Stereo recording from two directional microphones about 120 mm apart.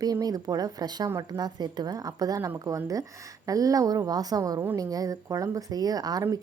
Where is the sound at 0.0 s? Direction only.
30° right (ahead or behind).